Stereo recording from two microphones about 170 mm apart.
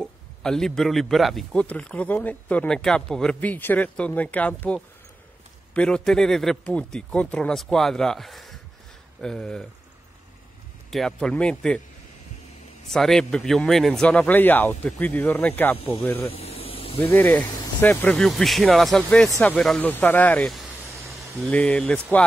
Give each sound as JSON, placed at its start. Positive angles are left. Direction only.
{"t": 0.0, "sound": "a man's voice", "side_deg": 5}
{"t": 10.9, "sound": "speech", "side_deg": 5}
{"t": 12.9, "sound": "a man's voice", "side_deg": 5}
{"t": 16.3, "sound": "vehicle", "side_deg": 35}
{"t": 17.0, "sound": "a man's voice", "side_deg": 10}